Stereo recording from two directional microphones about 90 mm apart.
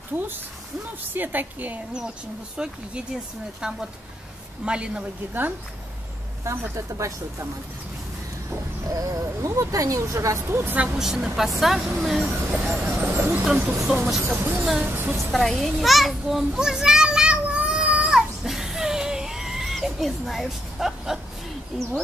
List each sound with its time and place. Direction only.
1.1 s a woman's voice: 20° right (ahead or behind)
2.5 s a woman's voice: 10° right (ahead or behind)
6.7 s speech: 35° right (ahead or behind)
8.8 s speech: 40° right (ahead or behind)
10.8 s a woman's voice: 10° right (ahead or behind)
12.8 s a woman's voice: 15° right (ahead or behind)
13.1 s a woman's voice: 25° right (ahead or behind)
13.8 s a woman's voice: 10° right (ahead or behind)
14.2 s a woman's voice: 25° right (ahead or behind)
15.3 s children playing: 5° left (ahead or behind)
21.7 s a woman's voice: 5° right (ahead or behind)